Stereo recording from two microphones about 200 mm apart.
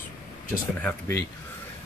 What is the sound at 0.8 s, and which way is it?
Speech, 10° left (ahead or behind).